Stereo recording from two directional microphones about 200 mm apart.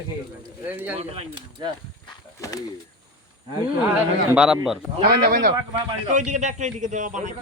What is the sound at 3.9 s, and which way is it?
Speech, 5° right (ahead or behind).